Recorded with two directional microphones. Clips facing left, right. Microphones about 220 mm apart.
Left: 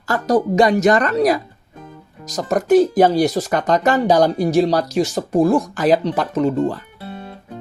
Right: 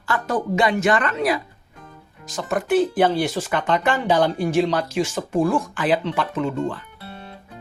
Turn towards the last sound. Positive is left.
turn(degrees=40)  # may be behind; listen again after turning